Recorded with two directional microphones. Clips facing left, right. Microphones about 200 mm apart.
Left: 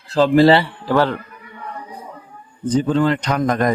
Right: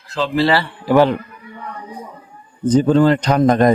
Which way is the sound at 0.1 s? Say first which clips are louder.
Left 6 dB; 40° left (ahead or behind).